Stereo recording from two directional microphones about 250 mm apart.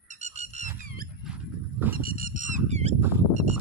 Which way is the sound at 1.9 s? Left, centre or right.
Right.